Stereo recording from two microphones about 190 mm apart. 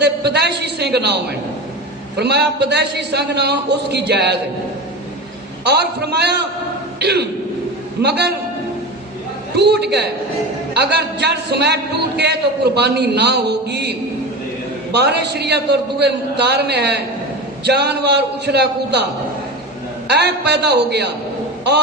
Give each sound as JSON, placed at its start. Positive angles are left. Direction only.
{"t": 0.0, "sound": "a sound", "side_deg": -60}
{"t": 2.1, "sound": "a man's voice", "side_deg": -60}
{"t": 5.6, "sound": "a man's voice", "side_deg": -60}
{"t": 9.6, "sound": "a man's voice", "side_deg": -60}
{"t": 14.9, "sound": "a man's voice", "side_deg": -60}
{"t": 20.1, "sound": "a man's voice", "side_deg": -60}